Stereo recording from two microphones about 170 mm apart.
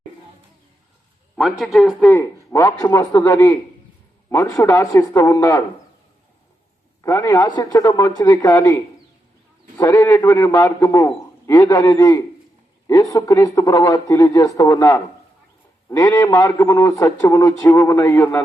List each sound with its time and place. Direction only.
1.4 s a man's voice: centre (ahead or behind)
2.0 s a man's voice: 15° left (ahead or behind)
7.0 s a man's voice: 20° left (ahead or behind)